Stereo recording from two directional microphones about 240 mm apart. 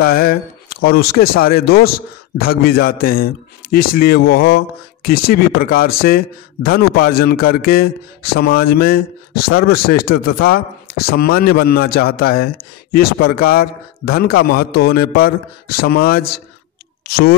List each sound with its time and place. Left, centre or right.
0.0 s speech: left